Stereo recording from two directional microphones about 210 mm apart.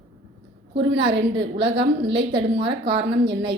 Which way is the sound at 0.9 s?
55° right (ahead or behind).